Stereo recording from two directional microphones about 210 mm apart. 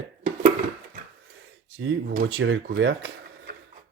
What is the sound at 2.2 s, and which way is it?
Speech, 70° right (ahead or behind).